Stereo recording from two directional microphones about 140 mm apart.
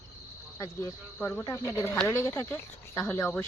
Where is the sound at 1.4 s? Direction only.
25° left (ahead or behind).